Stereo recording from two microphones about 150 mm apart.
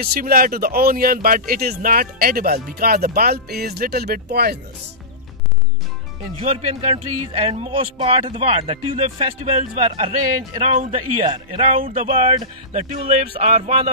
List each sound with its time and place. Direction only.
0.0 s speech: 80° right
6.5 s speech: 40° right (ahead or behind)